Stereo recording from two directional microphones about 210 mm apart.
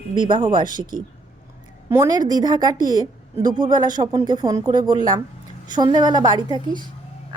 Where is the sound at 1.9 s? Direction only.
15° right (ahead or behind).